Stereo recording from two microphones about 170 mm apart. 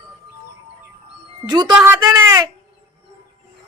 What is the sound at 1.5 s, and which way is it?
Speech, 25° right (ahead or behind).